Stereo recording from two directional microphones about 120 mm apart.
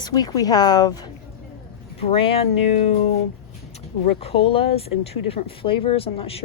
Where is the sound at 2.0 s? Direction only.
50° left (ahead or behind).